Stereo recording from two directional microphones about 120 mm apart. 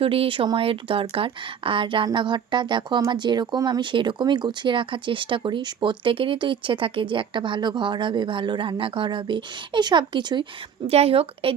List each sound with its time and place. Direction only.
0.0 s speech: 50° right (ahead or behind)
10.8 s speech: 55° right (ahead or behind)